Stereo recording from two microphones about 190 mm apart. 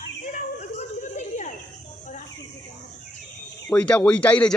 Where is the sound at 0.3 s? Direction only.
40° left (ahead or behind).